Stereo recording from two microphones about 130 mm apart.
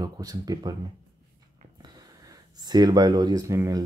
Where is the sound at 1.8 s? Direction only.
30° right (ahead or behind).